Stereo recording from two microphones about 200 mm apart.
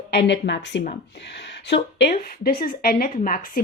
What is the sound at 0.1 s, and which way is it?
Speech, 55° left (ahead or behind).